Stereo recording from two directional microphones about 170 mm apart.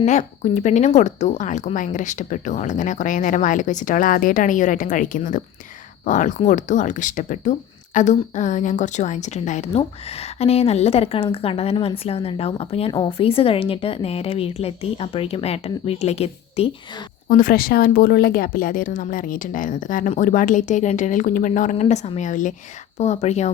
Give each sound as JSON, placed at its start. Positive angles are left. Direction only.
{"t": 0.0, "sound": "a woman's voice", "side_deg": 45}
{"t": 17.2, "sound": "a woman's voice", "side_deg": 55}